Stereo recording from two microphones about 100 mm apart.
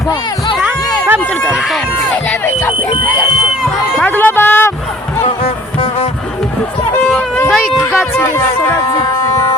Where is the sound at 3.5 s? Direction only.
Centre (ahead or behind).